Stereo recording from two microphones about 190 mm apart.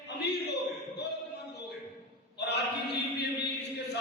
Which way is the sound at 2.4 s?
60° left (ahead or behind).